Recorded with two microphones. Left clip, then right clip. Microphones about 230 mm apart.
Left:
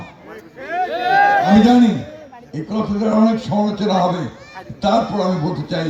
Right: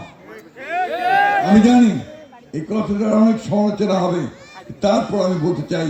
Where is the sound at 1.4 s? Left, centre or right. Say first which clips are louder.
Left 1 dB; left.